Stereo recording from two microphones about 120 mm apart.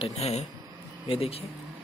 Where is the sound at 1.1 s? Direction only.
55° left (ahead or behind).